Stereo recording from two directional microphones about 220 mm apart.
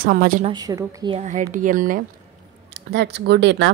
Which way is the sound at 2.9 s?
50° right (ahead or behind).